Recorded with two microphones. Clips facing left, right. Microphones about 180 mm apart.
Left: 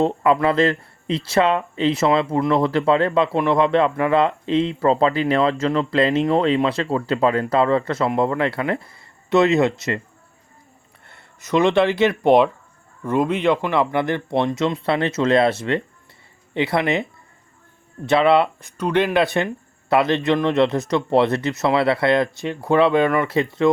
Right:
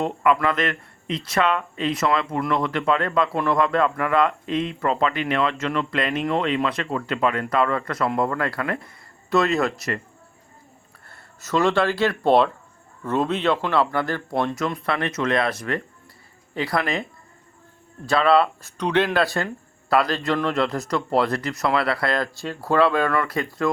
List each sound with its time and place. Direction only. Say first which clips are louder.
0.0 s speech: left 4 dB; 30° left (ahead or behind)
11.0 s speech: even; 20° left (ahead or behind)
18.8 s speech: left 2 dB; 10° left (ahead or behind)